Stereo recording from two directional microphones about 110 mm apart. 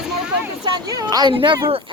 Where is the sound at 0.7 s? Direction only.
35° right (ahead or behind).